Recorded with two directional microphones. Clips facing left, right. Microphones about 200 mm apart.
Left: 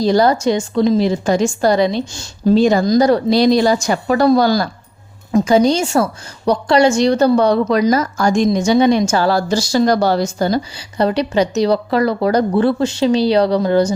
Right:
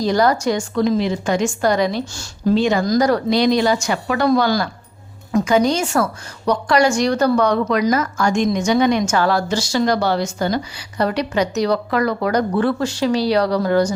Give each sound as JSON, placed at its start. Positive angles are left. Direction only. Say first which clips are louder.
{"t": 0.0, "sound": "a woman's voice", "louder": "left 3 dB", "side_deg": 30}
{"t": 2.6, "sound": "a woman's voice", "louder": "left 5 dB", "side_deg": 35}
{"t": 2.8, "sound": "a woman's voice", "louder": "left 4 dB", "side_deg": 25}